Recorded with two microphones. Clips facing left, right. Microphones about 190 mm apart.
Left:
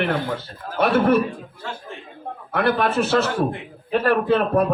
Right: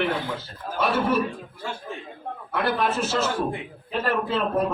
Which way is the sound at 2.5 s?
60° left (ahead or behind).